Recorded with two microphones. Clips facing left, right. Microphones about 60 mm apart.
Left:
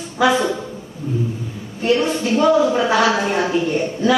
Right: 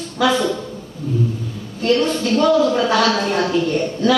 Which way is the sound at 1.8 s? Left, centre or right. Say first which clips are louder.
Even; centre.